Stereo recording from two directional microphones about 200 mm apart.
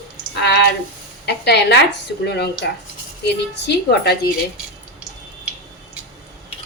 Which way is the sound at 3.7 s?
55° left (ahead or behind).